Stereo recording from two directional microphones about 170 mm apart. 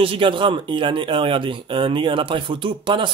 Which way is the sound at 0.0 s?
30° right (ahead or behind).